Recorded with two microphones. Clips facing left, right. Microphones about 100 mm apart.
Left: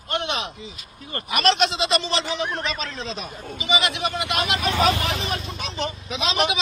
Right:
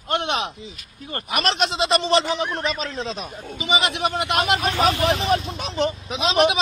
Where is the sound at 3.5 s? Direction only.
45° right (ahead or behind).